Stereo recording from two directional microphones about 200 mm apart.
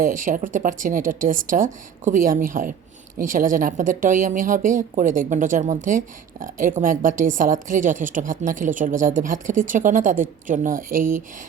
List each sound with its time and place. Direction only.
0.0 s a woman's voice: 40° right (ahead or behind)